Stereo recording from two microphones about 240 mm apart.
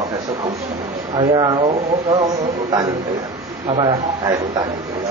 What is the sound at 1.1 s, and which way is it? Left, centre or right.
A man's voice, right.